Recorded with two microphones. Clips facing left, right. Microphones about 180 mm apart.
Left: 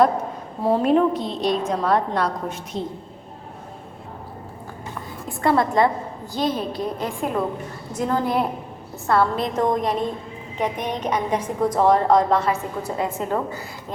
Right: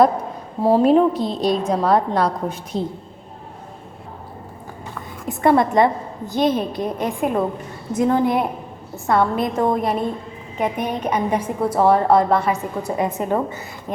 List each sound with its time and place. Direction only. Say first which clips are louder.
0.6 s a woman's voice: right 4 dB; 30° right (ahead or behind)
5.3 s a woman's voice: right 4 dB; 20° right (ahead or behind)